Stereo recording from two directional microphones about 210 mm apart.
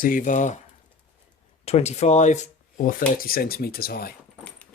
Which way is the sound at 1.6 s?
30° left (ahead or behind).